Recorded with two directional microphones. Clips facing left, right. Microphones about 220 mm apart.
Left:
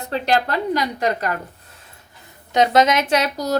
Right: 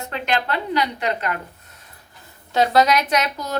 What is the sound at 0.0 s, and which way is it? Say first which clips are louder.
A woman's voice: left 4 dB; 35° left (ahead or behind).